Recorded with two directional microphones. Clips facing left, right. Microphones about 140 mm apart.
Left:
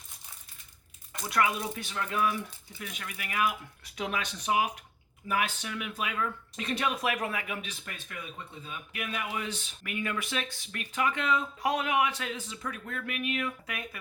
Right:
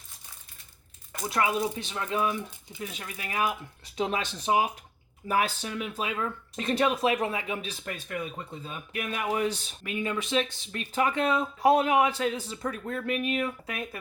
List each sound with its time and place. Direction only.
1.2 s speech: 30° right (ahead or behind)
9.8 s speech: 25° right (ahead or behind)